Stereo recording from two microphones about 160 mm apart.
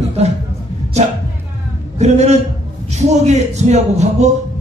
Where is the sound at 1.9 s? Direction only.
45° right (ahead or behind).